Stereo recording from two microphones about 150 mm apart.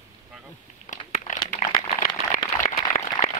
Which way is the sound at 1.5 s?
60° left (ahead or behind).